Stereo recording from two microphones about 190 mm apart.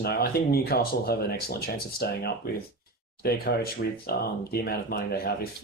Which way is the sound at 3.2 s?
55° left (ahead or behind).